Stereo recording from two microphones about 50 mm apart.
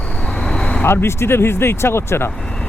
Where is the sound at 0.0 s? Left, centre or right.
Centre.